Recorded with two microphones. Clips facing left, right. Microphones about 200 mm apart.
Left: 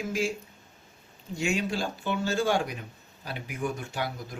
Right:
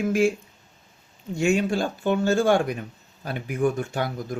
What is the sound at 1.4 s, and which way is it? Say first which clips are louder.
Speech: right 7 dB; 50° right (ahead or behind).